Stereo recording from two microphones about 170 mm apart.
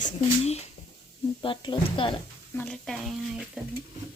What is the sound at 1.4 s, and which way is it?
Speech, 30° left (ahead or behind).